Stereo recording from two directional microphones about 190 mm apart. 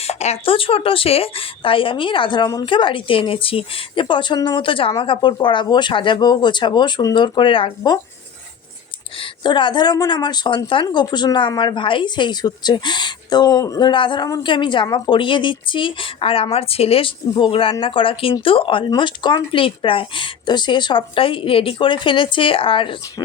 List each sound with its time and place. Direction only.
0.0 s a woman's voice: 35° left (ahead or behind)
9.1 s a woman's voice: 25° left (ahead or behind)